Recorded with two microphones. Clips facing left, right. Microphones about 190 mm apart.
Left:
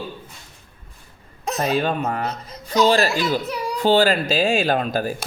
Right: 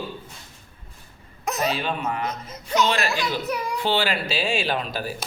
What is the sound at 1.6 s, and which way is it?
Speech, 45° left (ahead or behind).